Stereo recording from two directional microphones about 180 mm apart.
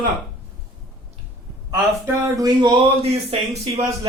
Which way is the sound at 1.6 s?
20° right (ahead or behind).